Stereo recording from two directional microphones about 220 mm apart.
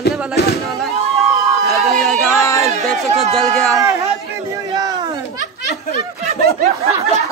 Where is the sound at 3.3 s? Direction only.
Centre (ahead or behind).